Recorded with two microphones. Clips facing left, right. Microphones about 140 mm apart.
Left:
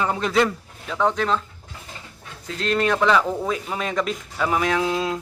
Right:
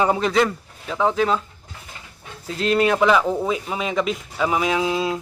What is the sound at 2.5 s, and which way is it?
Speech, 5° right (ahead or behind).